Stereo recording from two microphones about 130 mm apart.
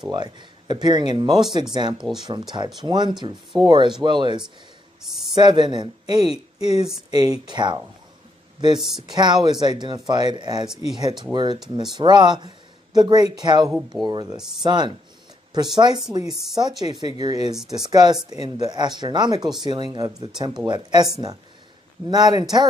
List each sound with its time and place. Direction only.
0.1 s speech: 35° right (ahead or behind)
2.0 s speech: 5° right (ahead or behind)
2.2 s speech: 35° right (ahead or behind)
22.1 s speech: 30° right (ahead or behind)